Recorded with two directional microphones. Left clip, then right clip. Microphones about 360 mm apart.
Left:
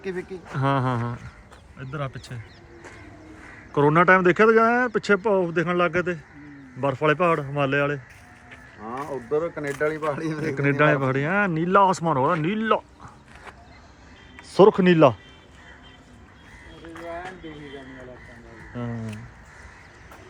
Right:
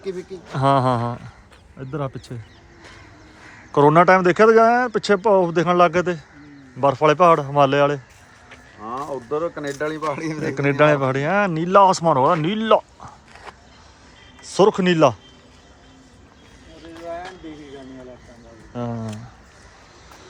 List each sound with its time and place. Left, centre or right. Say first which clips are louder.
0.5 s speech: right 7 dB; centre
3.7 s speech: right 4 dB; centre
8.8 s speech: right 4 dB; right
10.5 s speech: right 4 dB; centre
14.4 s speech: even; centre
18.7 s wild animals: right 6 dB; centre